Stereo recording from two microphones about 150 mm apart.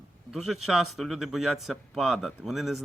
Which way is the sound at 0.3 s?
Centre (ahead or behind).